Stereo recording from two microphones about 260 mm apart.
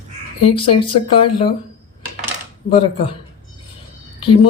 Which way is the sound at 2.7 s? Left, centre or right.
Centre.